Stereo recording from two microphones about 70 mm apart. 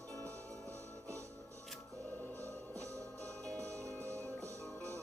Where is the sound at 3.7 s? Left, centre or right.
Right.